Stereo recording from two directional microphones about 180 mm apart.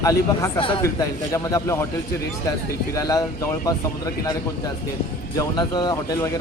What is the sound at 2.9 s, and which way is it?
Speech, 20° left (ahead or behind).